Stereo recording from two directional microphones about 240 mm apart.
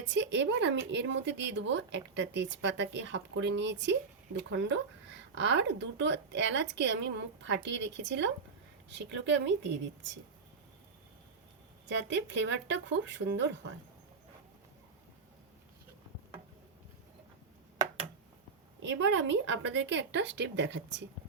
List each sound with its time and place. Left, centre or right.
0.1 s a woman's voice: right
11.9 s a woman's voice: right
18.8 s a woman's voice: right